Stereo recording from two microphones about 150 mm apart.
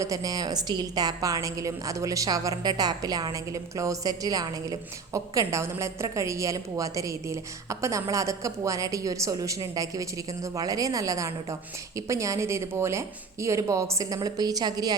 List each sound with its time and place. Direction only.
0.0 s a woman's voice: 25° right (ahead or behind)